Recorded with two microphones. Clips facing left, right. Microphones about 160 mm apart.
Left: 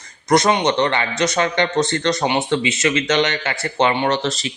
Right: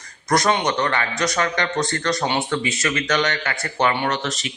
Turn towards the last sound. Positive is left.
turn(degrees=30)  # may be behind; listen again after turning